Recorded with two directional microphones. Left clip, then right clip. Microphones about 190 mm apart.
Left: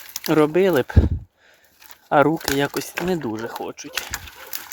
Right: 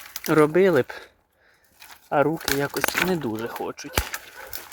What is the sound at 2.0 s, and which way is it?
Speech, 30° left (ahead or behind).